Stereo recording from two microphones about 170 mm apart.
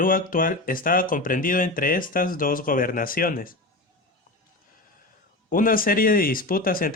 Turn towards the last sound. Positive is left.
turn(degrees=60)  # may be behind; listen again after turning